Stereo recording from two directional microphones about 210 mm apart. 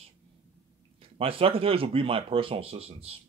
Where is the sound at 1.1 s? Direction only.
25° right (ahead or behind).